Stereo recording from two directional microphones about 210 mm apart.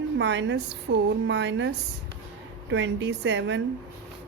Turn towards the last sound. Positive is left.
turn(degrees=-60)  # may be behind; listen again after turning